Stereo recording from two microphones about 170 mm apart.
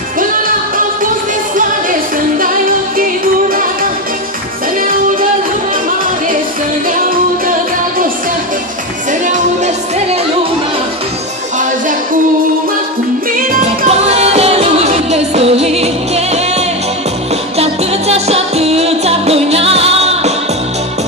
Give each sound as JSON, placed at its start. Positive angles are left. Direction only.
{"t": 13.8, "sound": "music", "side_deg": -40}
{"t": 17.6, "sound": "music", "side_deg": -40}